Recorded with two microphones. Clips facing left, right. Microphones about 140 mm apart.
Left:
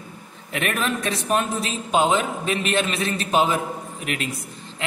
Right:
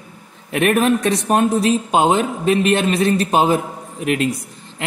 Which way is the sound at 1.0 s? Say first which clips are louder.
Right 7 dB; 40° right (ahead or behind).